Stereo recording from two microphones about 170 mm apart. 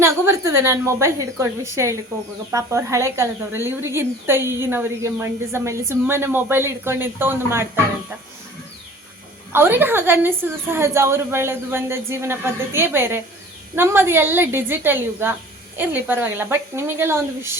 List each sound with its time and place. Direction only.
0.0 s a woman's voice: 15° right (ahead or behind)
9.5 s a woman's voice: 15° right (ahead or behind)